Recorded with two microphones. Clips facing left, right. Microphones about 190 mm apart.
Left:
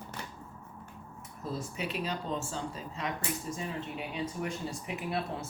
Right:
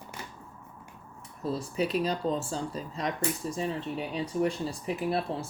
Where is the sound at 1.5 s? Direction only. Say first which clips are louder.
Right 7 dB; 35° right (ahead or behind).